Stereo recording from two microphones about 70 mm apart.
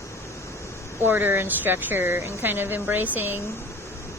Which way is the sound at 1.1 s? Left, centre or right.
Right.